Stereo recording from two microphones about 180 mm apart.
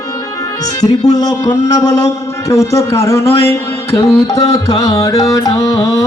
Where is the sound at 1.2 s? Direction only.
20° left (ahead or behind).